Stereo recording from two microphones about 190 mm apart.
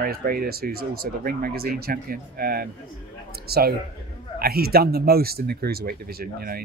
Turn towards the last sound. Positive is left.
turn(degrees=-50)  # may be behind; listen again after turning